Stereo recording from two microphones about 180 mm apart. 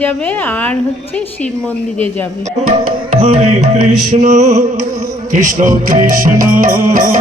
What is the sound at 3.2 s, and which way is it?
Music, 35° right (ahead or behind).